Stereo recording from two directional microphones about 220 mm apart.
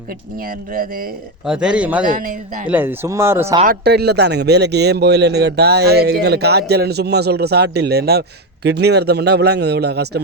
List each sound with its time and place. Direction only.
0.4 s speech: 40° right (ahead or behind)
1.5 s a man's voice: 5° right (ahead or behind)
2.0 s speech: 35° right (ahead or behind)
2.6 s speech: 10° right (ahead or behind)
3.6 s a man's voice: 45° right (ahead or behind)